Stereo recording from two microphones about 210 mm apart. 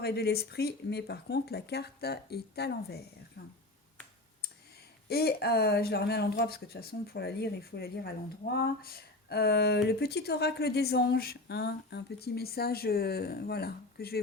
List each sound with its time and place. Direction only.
0.0 s speech: 50° left (ahead or behind)
5.0 s speech: 50° left (ahead or behind)